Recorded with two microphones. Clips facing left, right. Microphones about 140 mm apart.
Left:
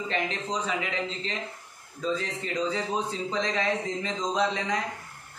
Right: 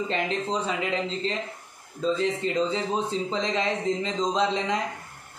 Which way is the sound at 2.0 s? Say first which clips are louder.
Right 5 dB; 25° right (ahead or behind).